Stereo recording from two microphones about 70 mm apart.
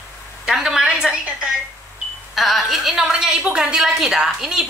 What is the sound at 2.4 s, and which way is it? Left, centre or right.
A woman's voice, centre.